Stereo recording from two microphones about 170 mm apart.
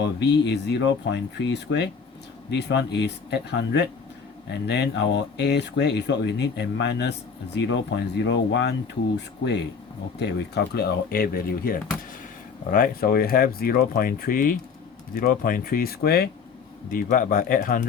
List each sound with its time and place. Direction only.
0.0 s speech: 85° left
10.2 s speech: 80° left
16.9 s speech: 55° left (ahead or behind)